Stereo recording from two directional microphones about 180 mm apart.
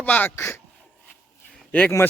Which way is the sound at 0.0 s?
10° left (ahead or behind).